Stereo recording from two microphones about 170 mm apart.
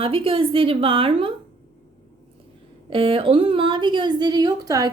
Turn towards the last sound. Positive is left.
turn(degrees=-20)  # may be behind; listen again after turning